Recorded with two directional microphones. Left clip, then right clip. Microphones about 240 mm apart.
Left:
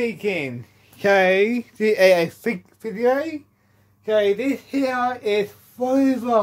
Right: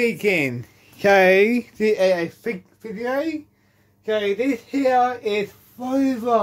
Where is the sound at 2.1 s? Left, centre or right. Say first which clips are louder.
Left 4 dB; left.